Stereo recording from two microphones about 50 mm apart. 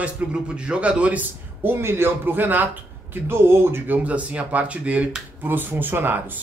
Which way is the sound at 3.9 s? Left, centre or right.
Right.